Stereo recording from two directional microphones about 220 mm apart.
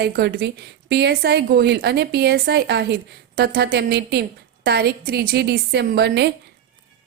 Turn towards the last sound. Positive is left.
turn(degrees=-50)  # may be behind; listen again after turning